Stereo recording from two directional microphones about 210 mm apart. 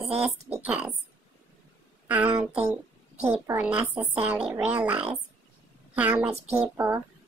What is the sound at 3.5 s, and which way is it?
A child's voice, 5° right (ahead or behind).